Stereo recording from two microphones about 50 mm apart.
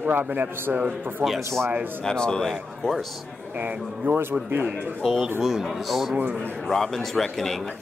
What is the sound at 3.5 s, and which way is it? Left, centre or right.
Speech, right.